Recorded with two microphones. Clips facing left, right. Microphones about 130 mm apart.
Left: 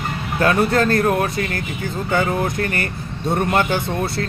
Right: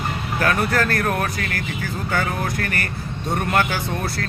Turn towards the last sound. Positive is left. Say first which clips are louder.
# left 3 dB
turn(degrees=20)  # may be behind; listen again after turning